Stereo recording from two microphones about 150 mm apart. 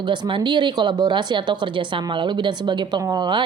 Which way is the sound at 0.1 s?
30° right (ahead or behind).